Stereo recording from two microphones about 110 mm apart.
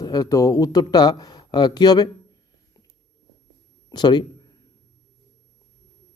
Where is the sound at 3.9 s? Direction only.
40° left (ahead or behind).